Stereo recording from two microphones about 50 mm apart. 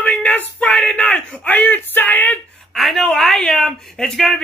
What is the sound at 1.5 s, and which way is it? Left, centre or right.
Speech, left.